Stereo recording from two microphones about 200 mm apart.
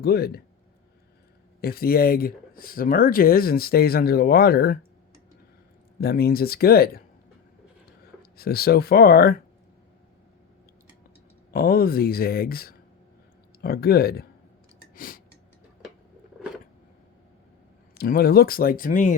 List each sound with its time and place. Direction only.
0.0 s speech: 50° left (ahead or behind)
1.6 s speech: 50° left (ahead or behind)
6.0 s speech: 50° left (ahead or behind)
8.2 s speech: 50° left (ahead or behind)
11.5 s speech: 45° left (ahead or behind)
14.9 s a sound: 45° left (ahead or behind)
17.9 s speech: 50° left (ahead or behind)